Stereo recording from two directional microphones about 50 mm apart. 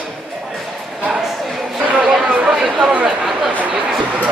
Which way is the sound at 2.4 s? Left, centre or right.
Centre.